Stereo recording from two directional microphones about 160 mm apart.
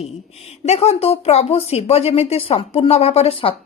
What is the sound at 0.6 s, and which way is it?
Speech, 40° left (ahead or behind).